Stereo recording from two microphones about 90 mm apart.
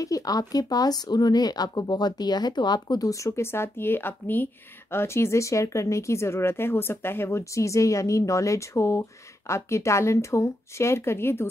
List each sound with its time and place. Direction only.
0.0 s speech: 40° left (ahead or behind)